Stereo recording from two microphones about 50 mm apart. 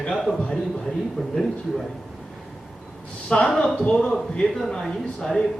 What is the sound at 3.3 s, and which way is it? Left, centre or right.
A man's voice, centre.